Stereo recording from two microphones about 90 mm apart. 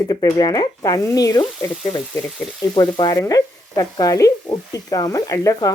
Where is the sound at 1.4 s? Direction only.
60° left (ahead or behind).